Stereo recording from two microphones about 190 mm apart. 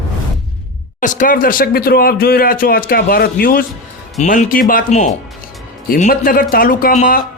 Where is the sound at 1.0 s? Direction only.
45° left (ahead or behind).